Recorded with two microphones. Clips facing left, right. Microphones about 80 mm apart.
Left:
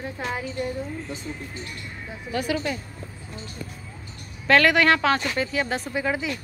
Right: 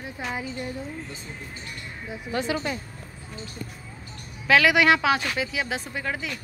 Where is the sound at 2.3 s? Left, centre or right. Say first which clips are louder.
Left 1 dB; right.